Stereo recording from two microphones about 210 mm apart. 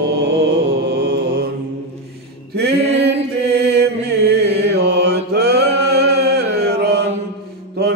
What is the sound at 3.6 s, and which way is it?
Mantra, 50° right (ahead or behind).